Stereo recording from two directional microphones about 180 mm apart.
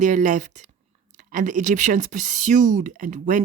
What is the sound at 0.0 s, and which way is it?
Speech, 45° right (ahead or behind).